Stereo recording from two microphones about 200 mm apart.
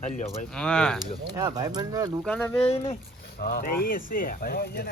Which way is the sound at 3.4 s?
45° left (ahead or behind).